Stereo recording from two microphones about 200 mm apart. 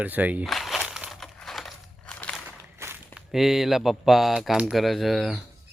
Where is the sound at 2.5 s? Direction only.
10° right (ahead or behind).